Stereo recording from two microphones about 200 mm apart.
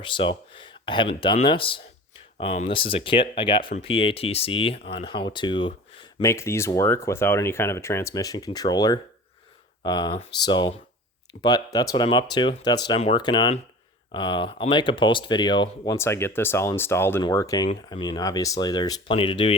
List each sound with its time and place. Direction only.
0.0 s speech: 25° left (ahead or behind)
6.2 s speech: 15° left (ahead or behind)